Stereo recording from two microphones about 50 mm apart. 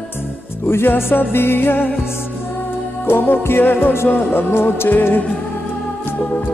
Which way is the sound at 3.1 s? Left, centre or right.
Left.